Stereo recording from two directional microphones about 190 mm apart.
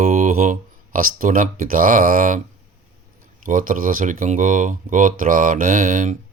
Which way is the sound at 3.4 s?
45° right (ahead or behind).